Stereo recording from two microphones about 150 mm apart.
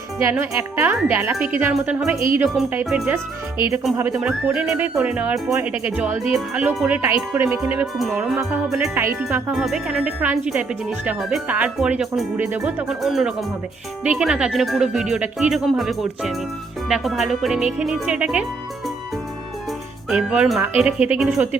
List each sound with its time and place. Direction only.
0.2 s speech: 20° right (ahead or behind)
9.5 s speech: 5° right (ahead or behind)
20.1 s speech: 5° right (ahead or behind)